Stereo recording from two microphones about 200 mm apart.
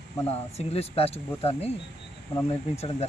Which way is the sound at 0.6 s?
30° left (ahead or behind).